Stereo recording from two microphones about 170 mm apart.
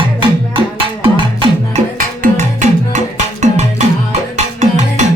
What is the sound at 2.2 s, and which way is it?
Music, 45° right (ahead or behind).